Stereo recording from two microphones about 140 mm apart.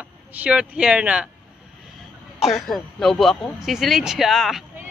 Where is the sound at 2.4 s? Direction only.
Centre (ahead or behind).